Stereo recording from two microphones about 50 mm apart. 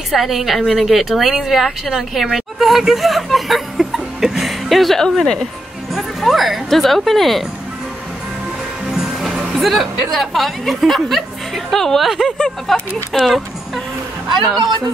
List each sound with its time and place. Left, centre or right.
0.1 s speech: centre
2.3 s a sound: centre
5.9 s speech: centre
8.9 s music: centre
9.5 s speech: centre